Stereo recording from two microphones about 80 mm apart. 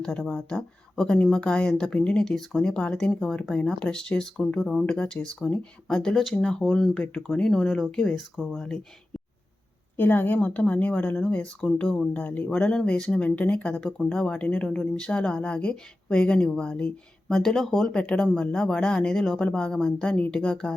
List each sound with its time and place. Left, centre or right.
0.0 s speech: centre
10.0 s a woman's voice: left
12.5 s speech: centre